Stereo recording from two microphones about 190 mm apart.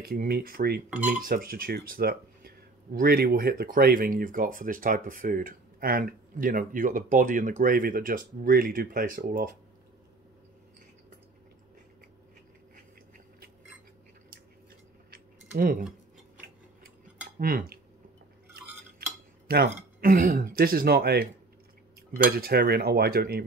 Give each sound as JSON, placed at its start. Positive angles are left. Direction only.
{"t": 0.0, "sound": "speech", "side_deg": -55}
{"t": 15.0, "sound": "a sound", "side_deg": -50}
{"t": 17.4, "sound": "speech", "side_deg": -50}
{"t": 18.9, "sound": "speech", "side_deg": -55}
{"t": 22.1, "sound": "cutlery", "side_deg": -55}